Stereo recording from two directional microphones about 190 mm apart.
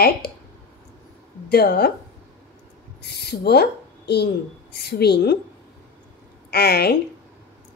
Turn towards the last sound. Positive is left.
turn(degrees=55)  # may be behind; listen again after turning